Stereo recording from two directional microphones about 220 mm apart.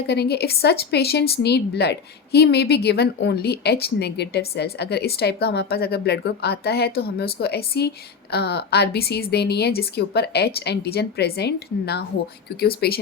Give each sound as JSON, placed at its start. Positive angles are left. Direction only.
{"t": 0.1, "sound": "a woman's voice", "side_deg": 50}